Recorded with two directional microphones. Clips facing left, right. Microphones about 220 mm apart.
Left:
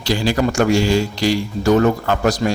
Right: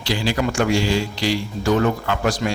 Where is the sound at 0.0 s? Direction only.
45° left (ahead or behind).